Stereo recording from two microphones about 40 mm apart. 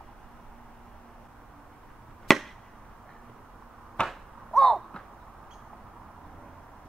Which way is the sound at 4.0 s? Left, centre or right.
Left.